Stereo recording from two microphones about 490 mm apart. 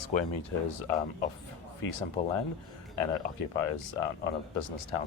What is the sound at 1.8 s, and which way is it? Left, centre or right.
Speech, left.